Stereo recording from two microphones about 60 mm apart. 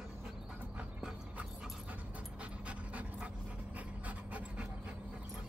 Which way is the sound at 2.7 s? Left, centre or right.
Right.